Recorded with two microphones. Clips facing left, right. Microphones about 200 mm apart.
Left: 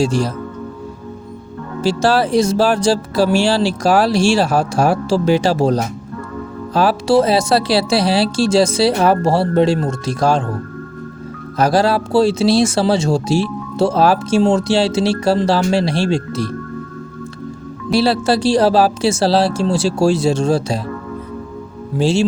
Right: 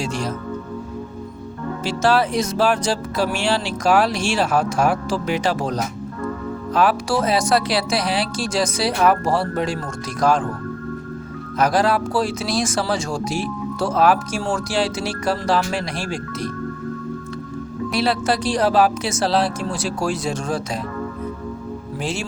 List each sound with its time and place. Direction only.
0.0 s speech: 35° left (ahead or behind)
1.8 s speech: 30° left (ahead or behind)
11.5 s speech: 30° left (ahead or behind)
17.9 s speech: 30° left (ahead or behind)
21.9 s speech: 30° left (ahead or behind)